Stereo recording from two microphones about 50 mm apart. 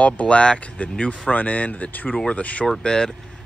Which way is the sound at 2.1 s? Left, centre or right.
Left.